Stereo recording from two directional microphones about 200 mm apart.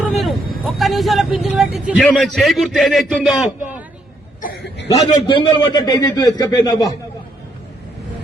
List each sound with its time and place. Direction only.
0.0 s vehicle: centre (ahead or behind)
0.6 s a man's voice: centre (ahead or behind)
4.4 s cough: 45° left (ahead or behind)
5.2 s a man's voice: 20° left (ahead or behind)